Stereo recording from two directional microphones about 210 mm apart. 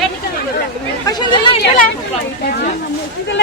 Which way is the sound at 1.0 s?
20° left (ahead or behind).